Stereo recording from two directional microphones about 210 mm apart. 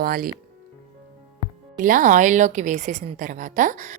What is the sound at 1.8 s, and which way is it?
A woman's voice, 40° right (ahead or behind).